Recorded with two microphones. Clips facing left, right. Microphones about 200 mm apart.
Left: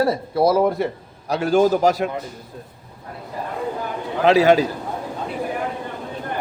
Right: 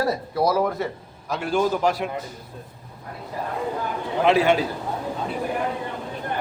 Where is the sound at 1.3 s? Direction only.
40° left (ahead or behind).